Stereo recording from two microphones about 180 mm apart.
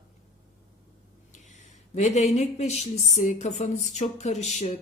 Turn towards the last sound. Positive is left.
turn(degrees=40)  # may be behind; listen again after turning